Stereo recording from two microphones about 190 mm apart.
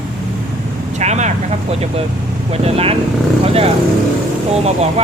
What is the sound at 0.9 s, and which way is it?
Speech, 35° right (ahead or behind).